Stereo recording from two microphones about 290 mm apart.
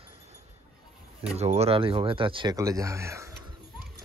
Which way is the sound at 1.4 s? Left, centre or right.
Right.